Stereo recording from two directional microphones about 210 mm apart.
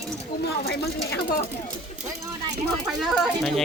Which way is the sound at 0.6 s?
50° left (ahead or behind).